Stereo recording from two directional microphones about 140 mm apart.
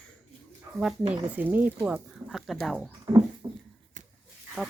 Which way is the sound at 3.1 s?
30° right (ahead or behind).